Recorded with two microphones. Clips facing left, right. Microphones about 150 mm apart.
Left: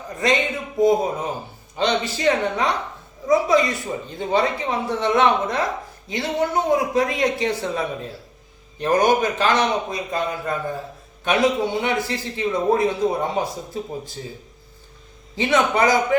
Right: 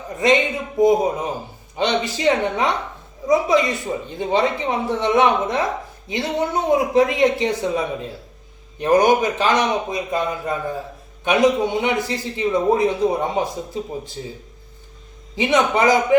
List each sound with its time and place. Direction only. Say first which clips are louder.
0.8 s a man's voice: right 2 dB; 20° right (ahead or behind)
15.4 s a man's voice: right 1 dB; 20° right (ahead or behind)